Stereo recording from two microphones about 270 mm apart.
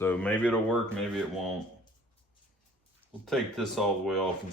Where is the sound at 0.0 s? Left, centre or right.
Centre.